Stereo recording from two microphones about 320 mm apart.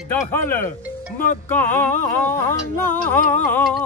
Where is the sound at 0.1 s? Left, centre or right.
Centre.